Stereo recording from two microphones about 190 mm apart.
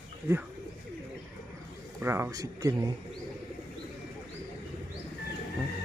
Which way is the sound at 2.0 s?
15° right (ahead or behind).